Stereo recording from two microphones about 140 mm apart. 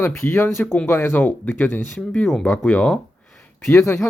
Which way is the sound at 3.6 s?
20° left (ahead or behind).